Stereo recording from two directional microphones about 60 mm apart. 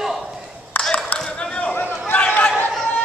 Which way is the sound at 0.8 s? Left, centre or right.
Centre.